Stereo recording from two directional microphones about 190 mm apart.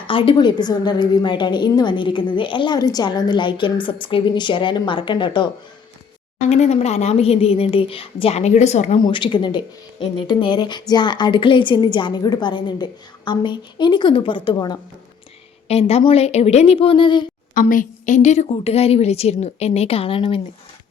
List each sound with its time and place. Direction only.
0.1 s speech: 25° left (ahead or behind)
6.5 s a woman's voice: 35° left (ahead or behind)
9.0 s a woman's voice: 25° left (ahead or behind)
17.5 s a woman's voice: 45° left (ahead or behind); by 20.4 s 30° left (ahead or behind)